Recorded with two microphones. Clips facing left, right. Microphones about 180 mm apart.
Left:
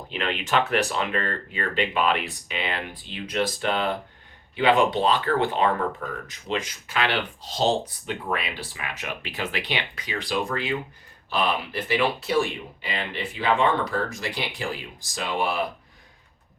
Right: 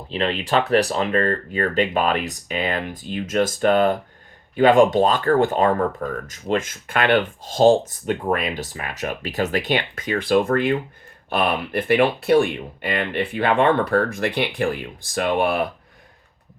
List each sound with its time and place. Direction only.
0.1 s speech: 35° right (ahead or behind); by 15.6 s 60° right (ahead or behind)